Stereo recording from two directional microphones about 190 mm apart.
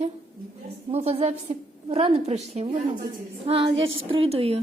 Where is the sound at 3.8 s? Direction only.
90° right.